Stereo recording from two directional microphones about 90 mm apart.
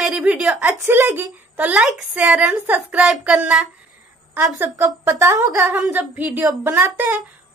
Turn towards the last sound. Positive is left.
turn(degrees=-20)  # may be behind; listen again after turning